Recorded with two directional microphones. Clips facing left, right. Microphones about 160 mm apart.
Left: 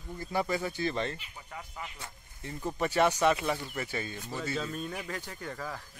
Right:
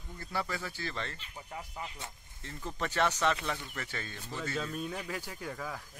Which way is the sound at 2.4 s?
15° left (ahead or behind).